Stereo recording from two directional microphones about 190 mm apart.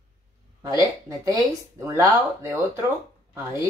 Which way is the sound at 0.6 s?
15° right (ahead or behind).